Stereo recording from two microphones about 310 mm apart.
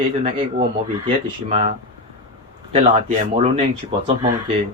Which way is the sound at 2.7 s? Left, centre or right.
Right.